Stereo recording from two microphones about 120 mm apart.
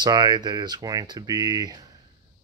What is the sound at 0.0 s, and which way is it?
Speech, 35° right (ahead or behind).